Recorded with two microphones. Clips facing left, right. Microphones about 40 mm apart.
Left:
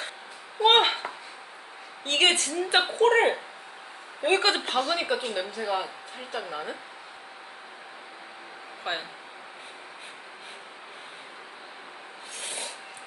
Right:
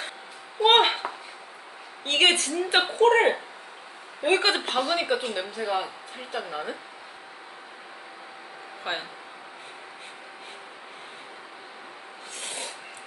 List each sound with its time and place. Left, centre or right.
0.6 s a sound: centre
2.0 s a woman's voice: centre
8.9 s a woman's voice: centre
12.4 s rub: centre